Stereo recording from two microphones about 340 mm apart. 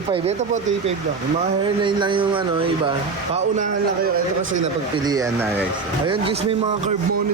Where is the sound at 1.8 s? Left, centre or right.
Centre.